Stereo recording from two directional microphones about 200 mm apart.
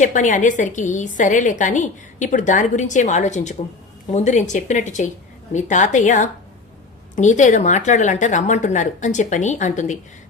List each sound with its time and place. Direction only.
0.0 s a woman's voice: 40° left (ahead or behind)